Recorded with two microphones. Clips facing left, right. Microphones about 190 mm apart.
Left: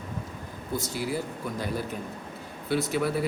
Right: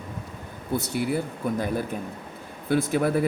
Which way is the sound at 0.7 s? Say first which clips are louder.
Right 4 dB; 60° right (ahead or behind).